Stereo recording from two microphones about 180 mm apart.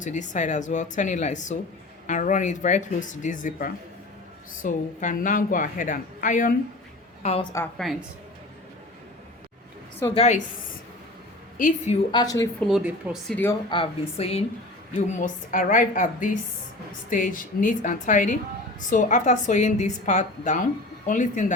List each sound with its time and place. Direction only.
0.0 s a woman's voice: 45° left (ahead or behind)
7.2 s a woman's voice: 35° left (ahead or behind)
7.8 s speech: centre (ahead or behind)
10.2 s a woman's voice: 40° left (ahead or behind)
11.5 s a woman's voice: 45° left (ahead or behind)
12.1 s speech: 20° left (ahead or behind)
12.5 s speech: centre (ahead or behind)
13.7 s a woman's voice: 30° left (ahead or behind)
15.1 s a woman's voice: 45° left (ahead or behind)